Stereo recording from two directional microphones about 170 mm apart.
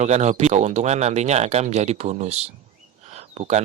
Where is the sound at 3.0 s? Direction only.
40° right (ahead or behind).